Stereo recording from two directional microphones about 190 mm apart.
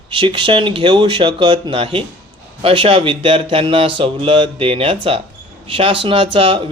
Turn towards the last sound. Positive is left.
turn(degrees=-30)  # may be behind; listen again after turning